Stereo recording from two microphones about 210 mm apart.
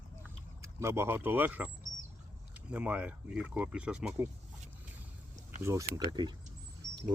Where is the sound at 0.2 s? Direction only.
15° right (ahead or behind).